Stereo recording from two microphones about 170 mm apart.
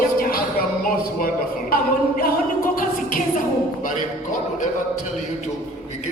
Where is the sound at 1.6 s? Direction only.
55° left (ahead or behind).